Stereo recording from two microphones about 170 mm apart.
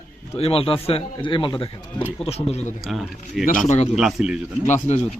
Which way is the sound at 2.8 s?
Centre (ahead or behind).